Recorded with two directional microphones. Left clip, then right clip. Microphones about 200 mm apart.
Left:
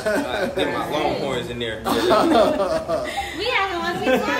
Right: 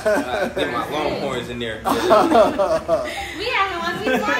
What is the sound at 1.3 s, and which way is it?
Speech, 5° left (ahead or behind).